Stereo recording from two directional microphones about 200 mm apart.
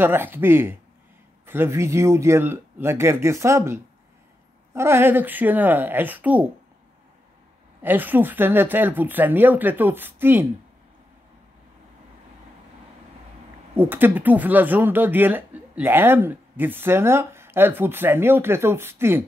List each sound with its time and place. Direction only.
0.0 s speech: 10° right (ahead or behind)
7.8 s speech: 10° right (ahead or behind)
13.7 s speech: 10° right (ahead or behind)